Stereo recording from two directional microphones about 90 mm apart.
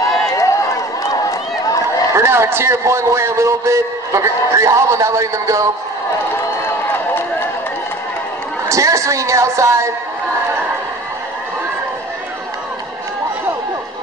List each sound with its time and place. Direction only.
2.1 s a man's voice: 30° right (ahead or behind)
8.6 s a man's voice: 35° right (ahead or behind)